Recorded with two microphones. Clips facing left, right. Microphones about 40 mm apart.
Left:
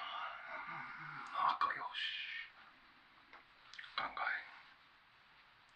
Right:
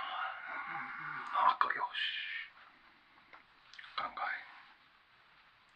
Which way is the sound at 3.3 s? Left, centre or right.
Centre.